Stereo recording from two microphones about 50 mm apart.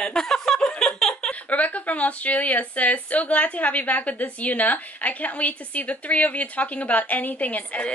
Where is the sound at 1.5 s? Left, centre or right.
Left.